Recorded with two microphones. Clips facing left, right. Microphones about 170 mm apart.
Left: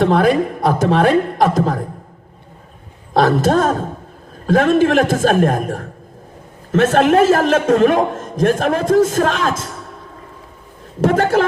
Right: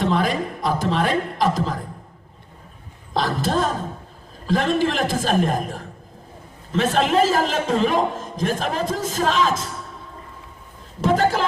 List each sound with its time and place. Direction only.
0.0 s a man's voice: 55° left (ahead or behind)
3.2 s a man's voice: 55° left (ahead or behind)
11.0 s a man's voice: 60° left (ahead or behind)